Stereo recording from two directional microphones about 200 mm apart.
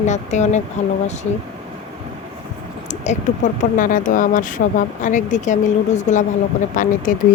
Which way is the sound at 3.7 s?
40° left (ahead or behind).